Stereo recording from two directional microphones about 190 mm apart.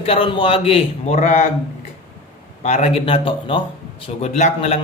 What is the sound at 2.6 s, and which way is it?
A man's voice, 35° left (ahead or behind).